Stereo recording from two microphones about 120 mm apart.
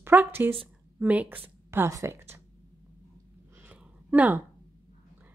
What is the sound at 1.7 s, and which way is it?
Speech, 25° right (ahead or behind).